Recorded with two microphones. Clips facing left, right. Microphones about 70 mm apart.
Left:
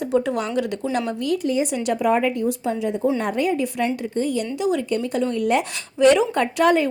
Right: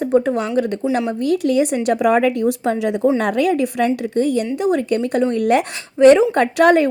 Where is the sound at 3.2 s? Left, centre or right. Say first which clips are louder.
Right 5 dB; right.